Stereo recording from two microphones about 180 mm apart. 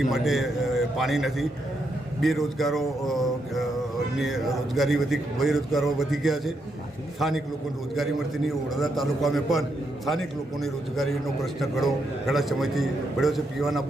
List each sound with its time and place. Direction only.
0.0 s a man's voice: centre (ahead or behind)